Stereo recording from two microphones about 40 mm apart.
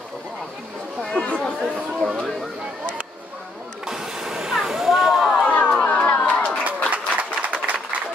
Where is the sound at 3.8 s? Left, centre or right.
Centre.